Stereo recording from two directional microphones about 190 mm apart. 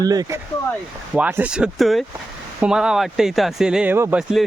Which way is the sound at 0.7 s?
Centre (ahead or behind).